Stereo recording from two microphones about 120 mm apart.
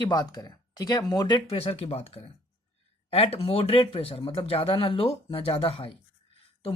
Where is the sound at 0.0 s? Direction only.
35° left (ahead or behind).